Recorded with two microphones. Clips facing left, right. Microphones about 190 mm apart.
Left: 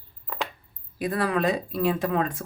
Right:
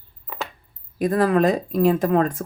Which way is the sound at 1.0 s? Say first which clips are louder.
Right 7 dB; 40° right (ahead or behind).